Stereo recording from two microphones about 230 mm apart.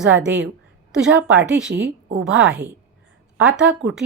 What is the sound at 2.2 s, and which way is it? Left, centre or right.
A woman's voice, centre.